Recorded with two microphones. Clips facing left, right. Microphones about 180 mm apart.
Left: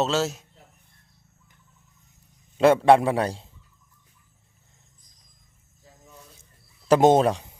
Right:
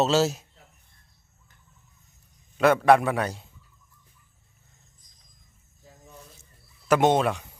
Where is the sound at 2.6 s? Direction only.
30° left (ahead or behind).